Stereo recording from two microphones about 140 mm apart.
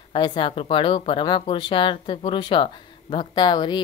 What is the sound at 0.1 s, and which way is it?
Speech, 35° left (ahead or behind).